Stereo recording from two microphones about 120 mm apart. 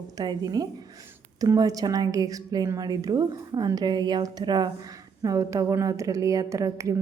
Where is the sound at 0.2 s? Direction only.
30° right (ahead or behind).